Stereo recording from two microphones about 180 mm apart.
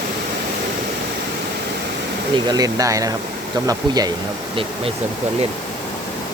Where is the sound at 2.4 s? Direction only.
20° right (ahead or behind).